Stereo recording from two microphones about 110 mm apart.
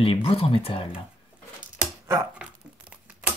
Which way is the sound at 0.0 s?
55° left (ahead or behind).